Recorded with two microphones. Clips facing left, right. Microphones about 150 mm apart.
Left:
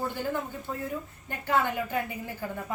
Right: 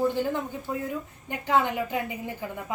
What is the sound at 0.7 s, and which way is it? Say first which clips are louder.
A woman's voice: right 4 dB; 15° right (ahead or behind).